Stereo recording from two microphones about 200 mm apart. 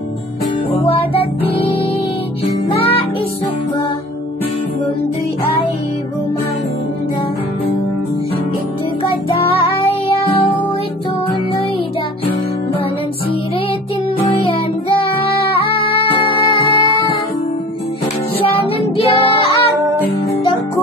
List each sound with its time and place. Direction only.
0.8 s music: 30° left (ahead or behind)
2.7 s music: 25° left (ahead or behind)
14.4 s music: 30° left (ahead or behind)
18.4 s child singing: 30° left (ahead or behind)